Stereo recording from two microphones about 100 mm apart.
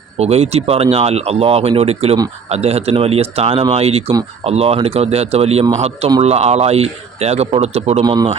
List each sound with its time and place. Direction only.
0.2 s speech: 90° right
8.0 s a man's voice: 45° right (ahead or behind)